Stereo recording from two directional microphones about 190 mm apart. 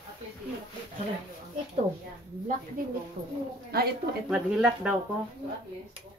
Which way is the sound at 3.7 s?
55° right (ahead or behind).